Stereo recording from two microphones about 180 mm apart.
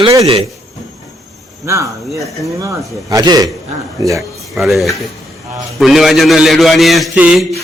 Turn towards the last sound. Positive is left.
turn(degrees=-5)  # may be behind; listen again after turning